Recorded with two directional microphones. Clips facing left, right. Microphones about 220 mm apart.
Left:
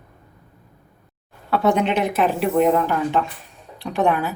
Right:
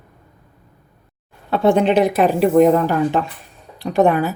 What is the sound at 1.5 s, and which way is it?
A woman's voice, 30° right (ahead or behind).